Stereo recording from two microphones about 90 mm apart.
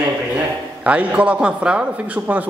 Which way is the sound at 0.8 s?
15° right (ahead or behind).